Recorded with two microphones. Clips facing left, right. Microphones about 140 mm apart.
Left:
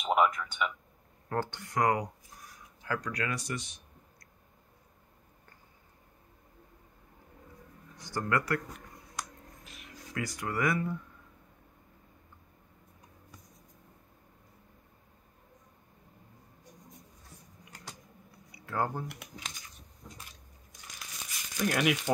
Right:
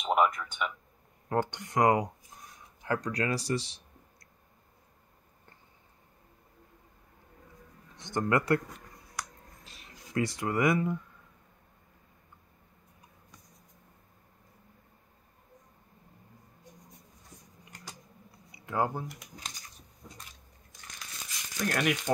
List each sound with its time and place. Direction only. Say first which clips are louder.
0.0 s a sound: even; centre (ahead or behind)
0.4 s a man's voice: left 1 dB; centre (ahead or behind)
1.3 s speech: right 3 dB; 15° right (ahead or behind)
7.9 s speech: right 3 dB; 20° right (ahead or behind)
9.7 s speech: left 3 dB; 30° right (ahead or behind)
18.5 s a sound: right 2 dB; 15° right (ahead or behind)
20.8 s crumpling: even; 10° left (ahead or behind)